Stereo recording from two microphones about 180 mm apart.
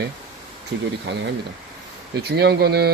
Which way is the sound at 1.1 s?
80° right.